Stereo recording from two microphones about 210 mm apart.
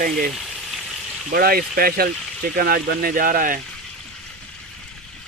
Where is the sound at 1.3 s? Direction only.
45° right (ahead or behind).